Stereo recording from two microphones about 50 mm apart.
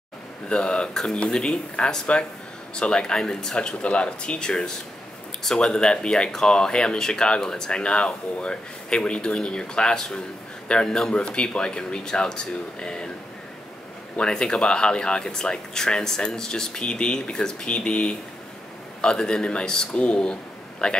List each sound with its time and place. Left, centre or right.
0.5 s speech: centre
14.3 s speech: centre